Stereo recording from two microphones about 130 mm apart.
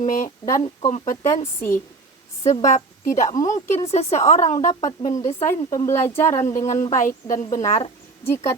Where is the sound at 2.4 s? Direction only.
65° left (ahead or behind).